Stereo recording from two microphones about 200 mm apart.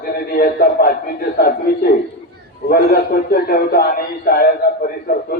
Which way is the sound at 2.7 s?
50° left (ahead or behind).